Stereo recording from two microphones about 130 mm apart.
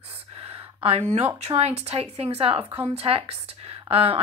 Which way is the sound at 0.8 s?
55° right (ahead or behind).